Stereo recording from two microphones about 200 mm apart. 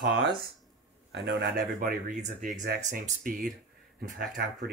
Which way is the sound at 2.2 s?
45° right (ahead or behind).